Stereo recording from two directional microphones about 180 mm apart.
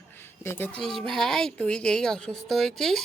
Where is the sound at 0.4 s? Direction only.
10° left (ahead or behind).